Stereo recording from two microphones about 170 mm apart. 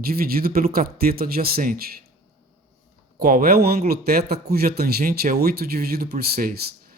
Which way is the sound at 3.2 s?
60° right (ahead or behind).